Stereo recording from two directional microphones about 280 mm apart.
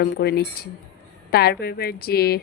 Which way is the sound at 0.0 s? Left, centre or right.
Left.